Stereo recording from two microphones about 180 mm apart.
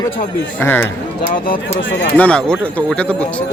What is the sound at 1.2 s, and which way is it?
Speech, 50° left (ahead or behind).